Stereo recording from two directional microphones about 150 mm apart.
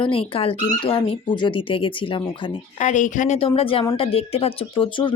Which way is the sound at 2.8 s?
55° left (ahead or behind).